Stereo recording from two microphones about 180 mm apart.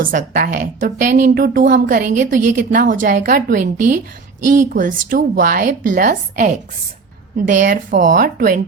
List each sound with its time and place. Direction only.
0.0 s a woman's voice: 50° right (ahead or behind)